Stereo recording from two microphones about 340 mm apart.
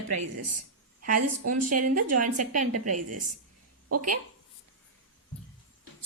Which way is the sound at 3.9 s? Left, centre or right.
Right.